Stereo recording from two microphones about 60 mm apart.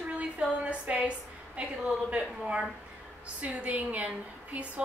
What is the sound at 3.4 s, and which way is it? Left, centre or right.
A woman's voice, right.